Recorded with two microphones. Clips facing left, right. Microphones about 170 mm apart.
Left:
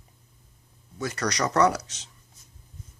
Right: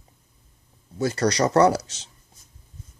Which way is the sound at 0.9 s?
30° right (ahead or behind).